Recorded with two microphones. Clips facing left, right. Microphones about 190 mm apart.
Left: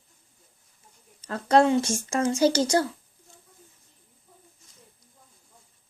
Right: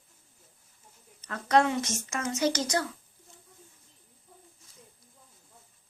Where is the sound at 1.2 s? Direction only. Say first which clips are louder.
Left 4 dB; 30° left (ahead or behind).